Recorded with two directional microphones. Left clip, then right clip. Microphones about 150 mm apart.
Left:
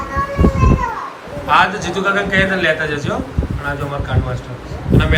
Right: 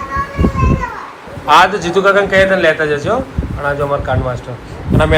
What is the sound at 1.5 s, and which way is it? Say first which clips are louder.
A man's voice: right 5 dB; centre (ahead or behind).